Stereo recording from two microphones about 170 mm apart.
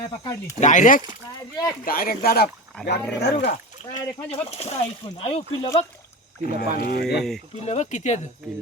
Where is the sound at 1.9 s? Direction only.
60° left (ahead or behind).